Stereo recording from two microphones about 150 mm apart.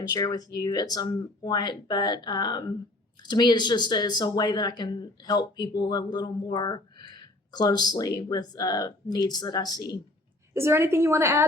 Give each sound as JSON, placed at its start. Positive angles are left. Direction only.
{"t": 0.0, "sound": "speech", "side_deg": 30}
{"t": 10.5, "sound": "a woman's voice", "side_deg": -15}